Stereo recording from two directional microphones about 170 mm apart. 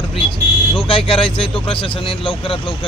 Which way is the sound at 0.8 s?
35° left (ahead or behind).